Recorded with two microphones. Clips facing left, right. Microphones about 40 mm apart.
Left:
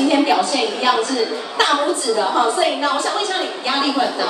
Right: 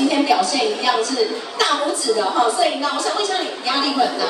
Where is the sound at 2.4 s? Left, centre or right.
Left.